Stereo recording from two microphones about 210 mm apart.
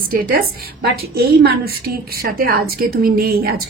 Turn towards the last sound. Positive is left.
turn(degrees=-45)  # may be behind; listen again after turning